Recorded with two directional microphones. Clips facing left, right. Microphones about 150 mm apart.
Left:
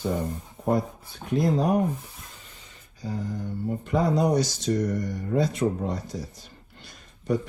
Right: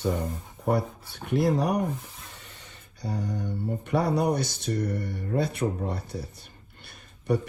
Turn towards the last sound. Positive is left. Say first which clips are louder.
# even
turn(degrees=-65)  # may be behind; listen again after turning